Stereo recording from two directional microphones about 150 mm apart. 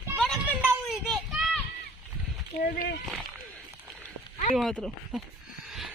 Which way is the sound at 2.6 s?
65° left (ahead or behind).